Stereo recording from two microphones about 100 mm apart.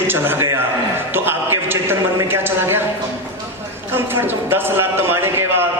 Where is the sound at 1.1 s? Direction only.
25° right (ahead or behind).